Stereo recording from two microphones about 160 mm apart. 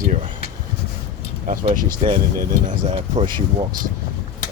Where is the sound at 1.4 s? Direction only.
60° right (ahead or behind).